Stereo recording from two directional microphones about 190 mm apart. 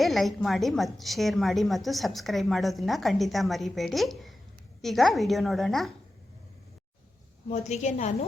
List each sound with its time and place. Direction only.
0.0 s a woman's voice: centre (ahead or behind)
7.5 s a woman's voice: 35° left (ahead or behind)